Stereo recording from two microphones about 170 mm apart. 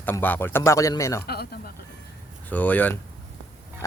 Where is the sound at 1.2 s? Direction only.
65° left (ahead or behind).